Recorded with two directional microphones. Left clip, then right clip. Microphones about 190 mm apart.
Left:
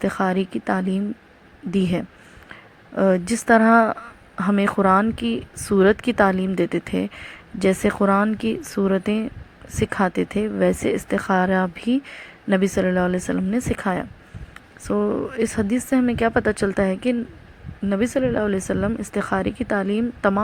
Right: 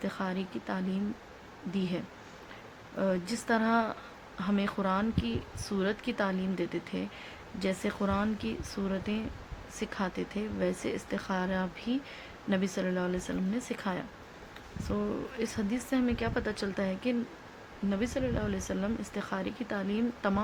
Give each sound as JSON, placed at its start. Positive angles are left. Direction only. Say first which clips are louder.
{"t": 0.0, "sound": "a woman's voice", "louder": "left 14 dB", "side_deg": 30}